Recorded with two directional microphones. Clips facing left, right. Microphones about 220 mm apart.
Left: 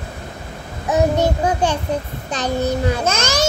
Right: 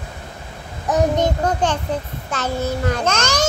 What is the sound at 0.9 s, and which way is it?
A child's voice, 10° left (ahead or behind).